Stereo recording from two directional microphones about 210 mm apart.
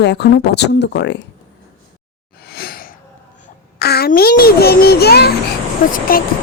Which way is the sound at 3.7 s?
50° left (ahead or behind).